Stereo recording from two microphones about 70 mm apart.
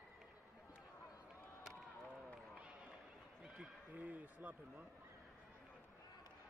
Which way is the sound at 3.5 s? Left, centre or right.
Right.